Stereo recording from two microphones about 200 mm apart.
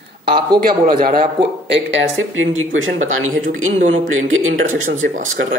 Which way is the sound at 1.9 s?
80° right.